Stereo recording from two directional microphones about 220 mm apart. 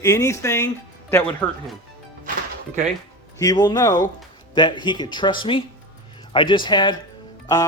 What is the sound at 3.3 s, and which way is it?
Speech, 15° left (ahead or behind).